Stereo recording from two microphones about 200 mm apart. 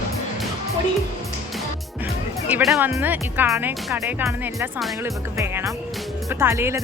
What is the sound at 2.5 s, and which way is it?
Speech, 5° right (ahead or behind).